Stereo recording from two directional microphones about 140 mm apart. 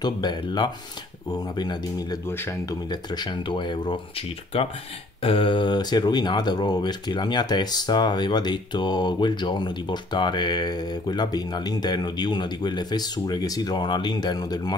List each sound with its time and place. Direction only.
0.0 s speech: 30° left (ahead or behind)
2.2 s speech: 15° left (ahead or behind)
2.9 s speech: 30° left (ahead or behind)
5.2 s speech: 40° left (ahead or behind)